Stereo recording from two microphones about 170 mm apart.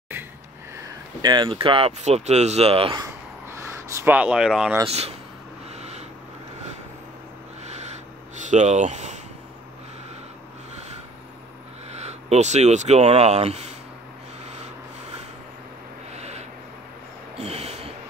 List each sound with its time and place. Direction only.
1.2 s speech: 30° right (ahead or behind)
3.4 s speech: 15° right (ahead or behind)
4.8 s speech: 40° right (ahead or behind)
5.8 s vehicle: 40° right (ahead or behind)
7.6 s owl: 40° right (ahead or behind)
8.4 s speech: 45° right (ahead or behind)
11.9 s speech: 40° right (ahead or behind)
16.1 s a sound: 40° right (ahead or behind)